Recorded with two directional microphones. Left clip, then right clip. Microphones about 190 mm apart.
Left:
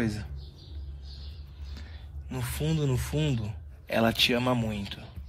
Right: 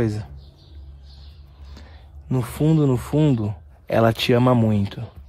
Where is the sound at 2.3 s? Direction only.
50° right (ahead or behind).